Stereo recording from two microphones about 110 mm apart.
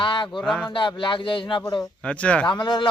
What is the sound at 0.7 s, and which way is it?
Speech, 50° left (ahead or behind).